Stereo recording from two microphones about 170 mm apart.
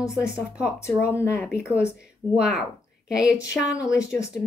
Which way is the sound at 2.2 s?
20° left (ahead or behind).